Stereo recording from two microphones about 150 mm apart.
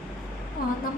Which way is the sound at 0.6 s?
70° left (ahead or behind).